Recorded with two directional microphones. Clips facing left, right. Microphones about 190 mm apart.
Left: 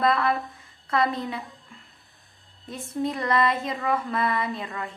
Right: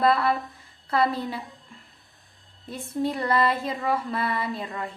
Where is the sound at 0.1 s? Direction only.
30° right (ahead or behind).